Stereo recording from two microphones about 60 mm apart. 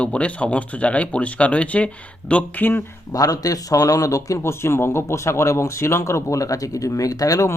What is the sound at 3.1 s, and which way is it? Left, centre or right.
Speech, left.